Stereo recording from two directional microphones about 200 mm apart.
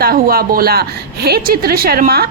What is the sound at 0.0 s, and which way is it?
A woman's voice, 50° right (ahead or behind).